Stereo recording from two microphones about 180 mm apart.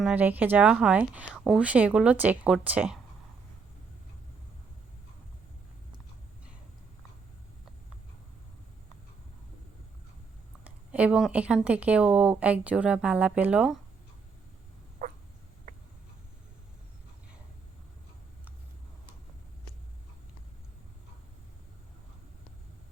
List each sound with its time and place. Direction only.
0.0 s speech: 10° right (ahead or behind)
10.9 s speech: 5° right (ahead or behind)
15.0 s a sound: 50° right (ahead or behind)